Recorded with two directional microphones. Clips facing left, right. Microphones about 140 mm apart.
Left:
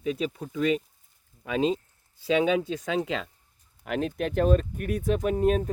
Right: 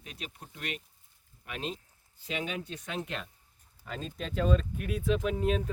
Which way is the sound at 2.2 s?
90° left.